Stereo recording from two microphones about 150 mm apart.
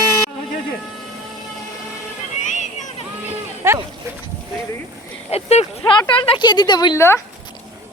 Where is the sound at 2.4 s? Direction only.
55° left (ahead or behind).